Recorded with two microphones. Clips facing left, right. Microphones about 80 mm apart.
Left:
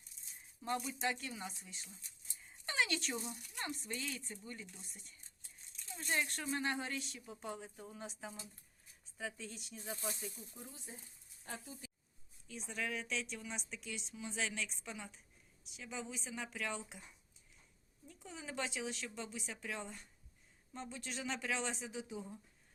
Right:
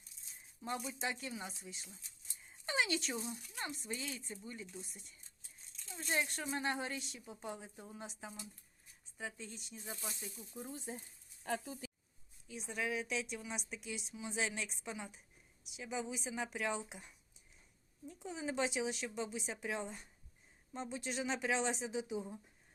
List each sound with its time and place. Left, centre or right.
0.6 s speech: centre
2.6 s a sound: centre
3.2 s speech: centre
6.1 s speech: centre
10.1 s snake: left
10.9 s speech: right
11.4 s speech: right
12.5 s speech: centre
18.1 s a woman's voice: centre